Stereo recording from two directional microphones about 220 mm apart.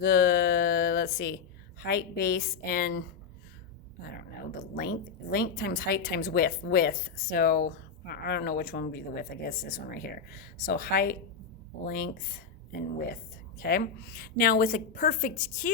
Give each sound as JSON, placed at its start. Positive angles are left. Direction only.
{"t": 0.0, "sound": "a sound", "side_deg": 45}
{"t": 1.8, "sound": "a woman's voice", "side_deg": 40}
{"t": 4.7, "sound": "a woman's voice", "side_deg": 40}
{"t": 13.6, "sound": "a woman's voice", "side_deg": 45}